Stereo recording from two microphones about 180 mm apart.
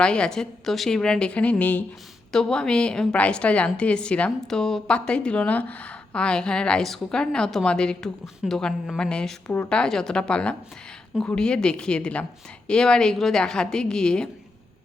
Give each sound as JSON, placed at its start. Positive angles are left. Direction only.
{"t": 0.0, "sound": "a woman's voice", "side_deg": 5}